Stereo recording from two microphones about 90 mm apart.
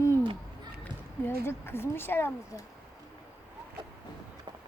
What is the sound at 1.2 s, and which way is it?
Speech, 25° left (ahead or behind).